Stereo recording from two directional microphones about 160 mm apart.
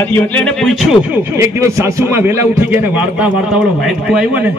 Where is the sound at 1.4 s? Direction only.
20° right (ahead or behind).